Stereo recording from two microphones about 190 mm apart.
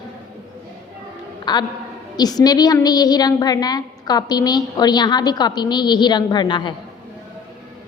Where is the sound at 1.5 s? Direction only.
25° left (ahead or behind).